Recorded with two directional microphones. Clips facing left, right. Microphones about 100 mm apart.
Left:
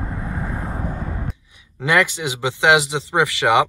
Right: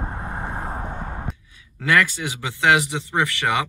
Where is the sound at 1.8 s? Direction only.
20° left (ahead or behind).